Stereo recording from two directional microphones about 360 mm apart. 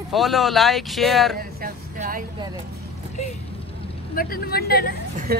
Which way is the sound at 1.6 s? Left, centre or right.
Right.